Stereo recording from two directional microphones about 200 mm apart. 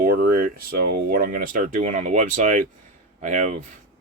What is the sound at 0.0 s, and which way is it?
Speech, 45° right (ahead or behind).